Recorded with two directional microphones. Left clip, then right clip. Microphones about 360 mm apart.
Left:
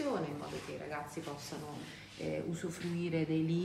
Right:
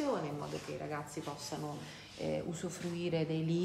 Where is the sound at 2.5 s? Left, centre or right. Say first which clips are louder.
Even; right.